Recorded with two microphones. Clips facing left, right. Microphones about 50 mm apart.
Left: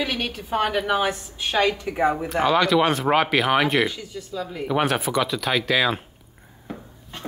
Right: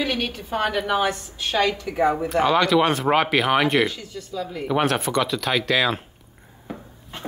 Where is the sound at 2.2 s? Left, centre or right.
Centre.